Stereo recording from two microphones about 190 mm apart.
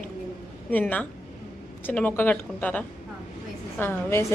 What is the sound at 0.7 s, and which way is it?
A woman's voice, 10° left (ahead or behind).